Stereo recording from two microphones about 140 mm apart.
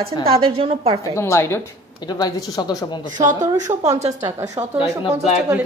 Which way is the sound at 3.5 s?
30° right (ahead or behind).